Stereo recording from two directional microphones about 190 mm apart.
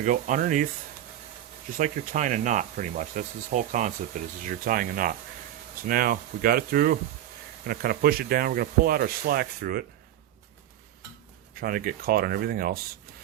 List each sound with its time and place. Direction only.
0.0 s speech: 40° right (ahead or behind)
1.7 s speech: 45° right (ahead or behind)
11.6 s speech: 50° right (ahead or behind)